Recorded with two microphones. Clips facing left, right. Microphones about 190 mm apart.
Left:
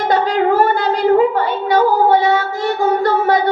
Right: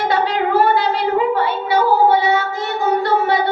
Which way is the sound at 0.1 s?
45° left (ahead or behind).